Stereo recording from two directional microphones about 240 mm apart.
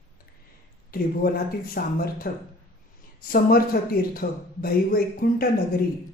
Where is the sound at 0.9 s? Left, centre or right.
Left.